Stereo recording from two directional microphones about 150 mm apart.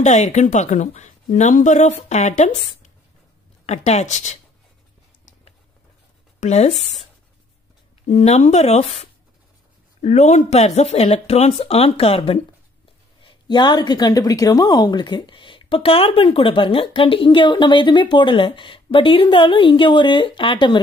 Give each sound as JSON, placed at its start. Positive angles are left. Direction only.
{"t": 0.0, "sound": "speech", "side_deg": 50}
{"t": 6.4, "sound": "speech", "side_deg": 45}
{"t": 8.1, "sound": "speech", "side_deg": 45}
{"t": 13.2, "sound": "a woman's voice", "side_deg": 30}